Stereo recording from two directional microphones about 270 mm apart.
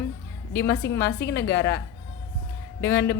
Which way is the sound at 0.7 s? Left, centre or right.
Left.